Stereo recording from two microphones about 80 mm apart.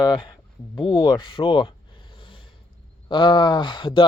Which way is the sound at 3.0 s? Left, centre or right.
Left.